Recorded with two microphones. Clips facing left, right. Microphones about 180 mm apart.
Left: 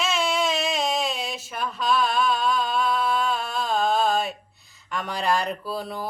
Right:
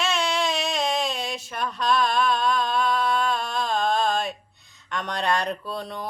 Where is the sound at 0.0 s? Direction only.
5° left (ahead or behind).